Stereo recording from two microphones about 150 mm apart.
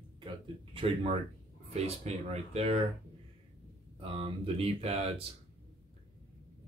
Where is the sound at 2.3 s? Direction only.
45° right (ahead or behind).